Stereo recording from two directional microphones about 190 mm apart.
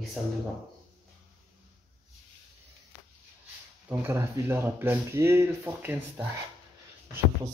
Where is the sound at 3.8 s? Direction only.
15° right (ahead or behind).